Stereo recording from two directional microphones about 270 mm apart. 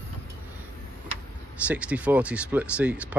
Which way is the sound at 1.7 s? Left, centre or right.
Centre.